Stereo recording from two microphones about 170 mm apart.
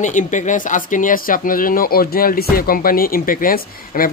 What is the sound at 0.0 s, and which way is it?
Speech, 45° left (ahead or behind).